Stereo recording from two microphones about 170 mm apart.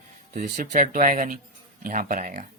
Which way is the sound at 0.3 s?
50° right (ahead or behind).